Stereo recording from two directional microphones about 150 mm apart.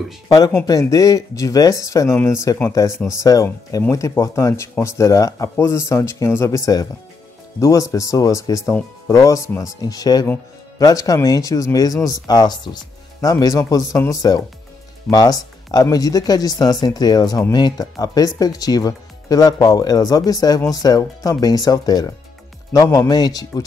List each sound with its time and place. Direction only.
0.7 s speech: 20° left (ahead or behind)